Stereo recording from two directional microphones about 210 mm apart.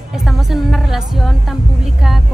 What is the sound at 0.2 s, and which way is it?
Speech, centre (ahead or behind).